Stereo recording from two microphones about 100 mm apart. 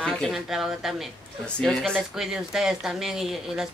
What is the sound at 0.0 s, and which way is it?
Speech, centre (ahead or behind).